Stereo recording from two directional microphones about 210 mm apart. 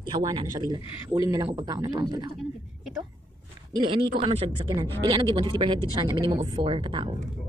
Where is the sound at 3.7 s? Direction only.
25° right (ahead or behind).